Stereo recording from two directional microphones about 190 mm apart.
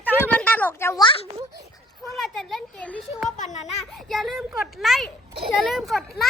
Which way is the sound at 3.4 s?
40° left (ahead or behind).